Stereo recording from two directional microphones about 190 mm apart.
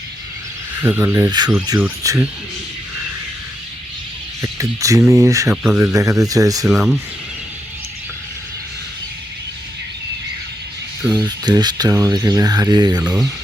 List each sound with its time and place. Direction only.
0.8 s speech: 10° right (ahead or behind)
4.5 s speech: 15° right (ahead or behind)
5.5 s speech: 5° right (ahead or behind)
6.7 s speech: centre (ahead or behind)
11.1 s speech: 20° right (ahead or behind)
13.0 s speech: 5° right (ahead or behind)